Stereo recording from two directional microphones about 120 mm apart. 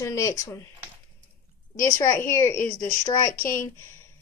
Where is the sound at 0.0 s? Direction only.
25° left (ahead or behind).